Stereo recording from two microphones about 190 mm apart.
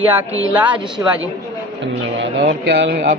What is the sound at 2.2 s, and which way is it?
Speech, 65° right (ahead or behind).